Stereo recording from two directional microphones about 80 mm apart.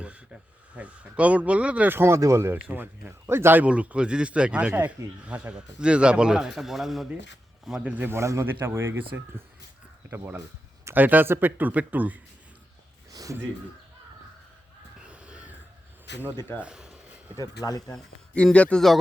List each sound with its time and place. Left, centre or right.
0.7 s speech: centre
2.0 s a man's voice: right; by 7.1 s centre
7.9 s speech: right
8.1 s speech: right
13.1 s a sound: right
15.0 s a sound: centre
16.6 s a man's voice: centre
17.6 s speech: left
17.9 s speech: centre
18.5 s a man's voice: centre